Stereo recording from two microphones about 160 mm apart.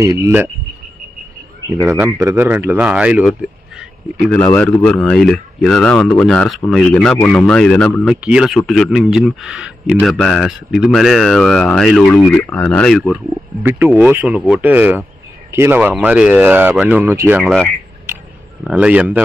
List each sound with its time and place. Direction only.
0.0 s speech: 20° right (ahead or behind)
1.8 s speech: 15° right (ahead or behind)
4.6 s a man's voice: 10° left (ahead or behind)
13.6 s speech: 15° right (ahead or behind)
17.4 s a man's voice: centre (ahead or behind)